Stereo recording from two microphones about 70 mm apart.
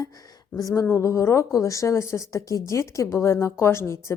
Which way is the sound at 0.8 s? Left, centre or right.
Left.